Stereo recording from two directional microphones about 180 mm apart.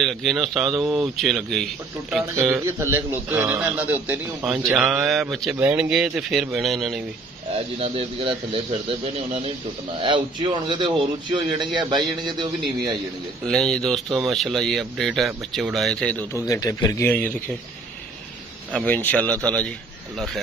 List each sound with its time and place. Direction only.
0.0 s a man's voice: centre (ahead or behind)
2.6 s a man's voice: 15° right (ahead or behind)
7.5 s speech: 35° right (ahead or behind)
13.5 s a man's voice: centre (ahead or behind)
16.4 s a man's voice: 20° left (ahead or behind)
18.7 s a man's voice: 5° left (ahead or behind)